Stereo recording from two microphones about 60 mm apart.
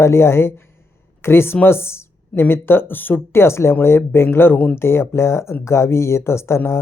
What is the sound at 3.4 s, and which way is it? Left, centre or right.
Speech, left.